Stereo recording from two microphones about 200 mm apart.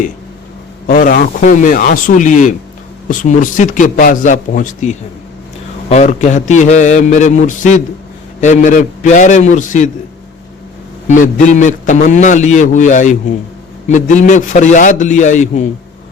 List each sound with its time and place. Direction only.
0.9 s a man's voice: 40° left (ahead or behind)
11.2 s a man's voice: 40° left (ahead or behind)